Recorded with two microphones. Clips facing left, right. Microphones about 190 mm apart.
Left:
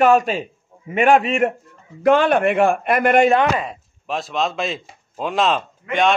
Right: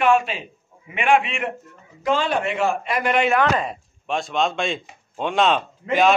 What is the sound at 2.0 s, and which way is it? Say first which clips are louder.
A man's voice: left 7 dB; 60° left (ahead or behind).